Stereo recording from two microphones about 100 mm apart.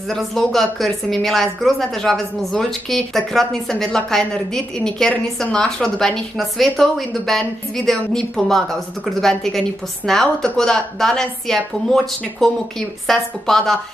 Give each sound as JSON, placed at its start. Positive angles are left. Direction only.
{"t": 0.1, "sound": "a woman's voice", "side_deg": 5}